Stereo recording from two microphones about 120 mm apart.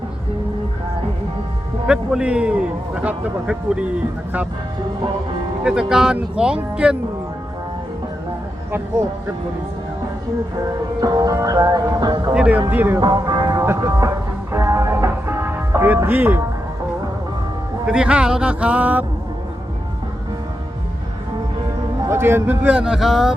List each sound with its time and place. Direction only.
1.9 s a man's voice: 5° right (ahead or behind)
5.9 s a man's voice: 5° right (ahead or behind)
11.0 s music: 30° right (ahead or behind)
12.3 s a man's voice: 10° right (ahead or behind)
13.0 s music: 35° right (ahead or behind)
13.6 s music: 25° right (ahead or behind)
17.8 s a man's voice: 10° right (ahead or behind)
22.1 s a man's voice: 20° right (ahead or behind); by 23.3 s centre (ahead or behind)